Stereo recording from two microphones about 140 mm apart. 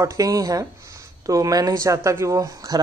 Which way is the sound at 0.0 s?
25° right (ahead or behind).